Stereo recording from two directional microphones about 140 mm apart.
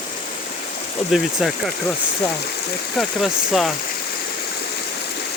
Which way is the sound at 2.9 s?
Centre (ahead or behind).